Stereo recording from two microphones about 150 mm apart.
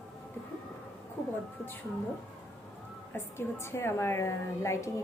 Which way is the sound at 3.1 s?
15° left (ahead or behind).